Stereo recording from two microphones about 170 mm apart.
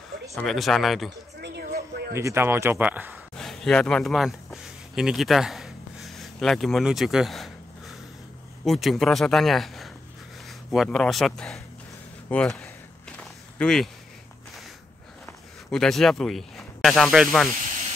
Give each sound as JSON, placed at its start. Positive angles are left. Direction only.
{"t": 0.3, "sound": "speech", "side_deg": 0}
{"t": 1.4, "sound": "a sound", "side_deg": -70}
{"t": 2.1, "sound": "speech", "side_deg": -15}
{"t": 3.3, "sound": "a sound", "side_deg": 0}
{"t": 8.6, "sound": "speech", "side_deg": 0}
{"t": 13.2, "sound": "walk", "side_deg": 5}
{"t": 15.7, "sound": "speech", "side_deg": 0}